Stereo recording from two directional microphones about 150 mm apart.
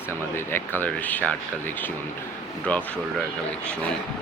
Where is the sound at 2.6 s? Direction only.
10° left (ahead or behind).